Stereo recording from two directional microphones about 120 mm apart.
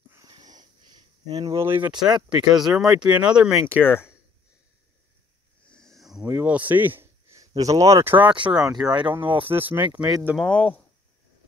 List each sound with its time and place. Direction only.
0.1 s wheeze: 30° right (ahead or behind)
1.3 s speech: 30° right (ahead or behind)
1.9 s speech: 5° right (ahead or behind)
3.6 s speech: 20° left (ahead or behind)
5.7 s a sound: 5° left (ahead or behind)
6.2 s speech: 10° right (ahead or behind)
7.3 s speech: 30° right (ahead or behind); by 10.3 s 15° right (ahead or behind)
10.3 s speech: 10° left (ahead or behind)